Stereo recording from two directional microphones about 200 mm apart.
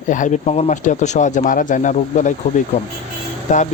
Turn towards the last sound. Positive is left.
turn(degrees=35)  # may be behind; listen again after turning